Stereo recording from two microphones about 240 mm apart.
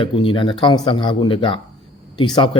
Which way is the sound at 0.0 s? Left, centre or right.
Left.